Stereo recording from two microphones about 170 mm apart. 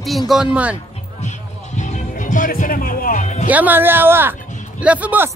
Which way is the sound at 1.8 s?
45° left (ahead or behind).